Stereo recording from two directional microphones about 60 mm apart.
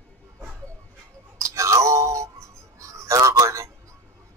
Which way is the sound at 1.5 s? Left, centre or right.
Right.